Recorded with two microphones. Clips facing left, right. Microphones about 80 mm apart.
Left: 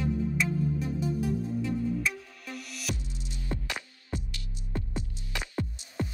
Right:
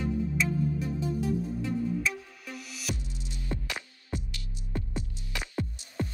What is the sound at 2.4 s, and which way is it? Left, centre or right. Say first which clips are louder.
Music: left 2 dB; centre.